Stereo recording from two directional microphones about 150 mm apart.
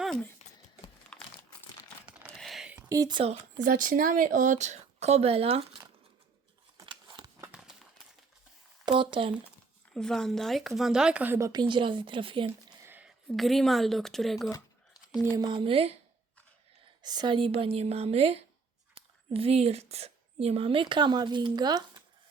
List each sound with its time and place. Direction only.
0.0 s a sound: 5° left (ahead or behind)
1.1 s crumpling: 5° left (ahead or behind)
2.4 s a sound: centre (ahead or behind)
2.9 s speech: 25° right (ahead or behind)
3.6 s speech: 65° right (ahead or behind); by 5.8 s 40° right (ahead or behind)
6.7 s a sound: 30° right (ahead or behind)
8.8 s speech: 30° right (ahead or behind)
9.9 s speech: 5° left (ahead or behind); by 11.6 s 20° right (ahead or behind)
11.7 s speech: 35° right (ahead or behind)
12.5 s speech: 15° right (ahead or behind)
15.4 s speech: 30° right (ahead or behind)
17.0 s speech: 30° right (ahead or behind)